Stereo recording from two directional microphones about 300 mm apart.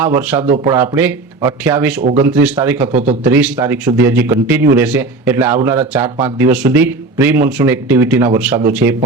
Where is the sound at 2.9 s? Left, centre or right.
Right.